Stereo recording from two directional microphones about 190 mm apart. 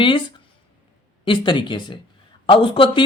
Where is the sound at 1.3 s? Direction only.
25° left (ahead or behind).